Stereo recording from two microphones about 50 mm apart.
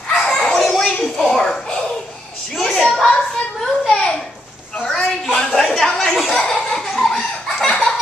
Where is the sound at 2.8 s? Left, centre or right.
Centre.